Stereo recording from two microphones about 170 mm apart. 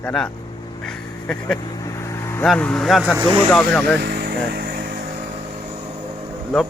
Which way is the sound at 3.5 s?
Centre (ahead or behind).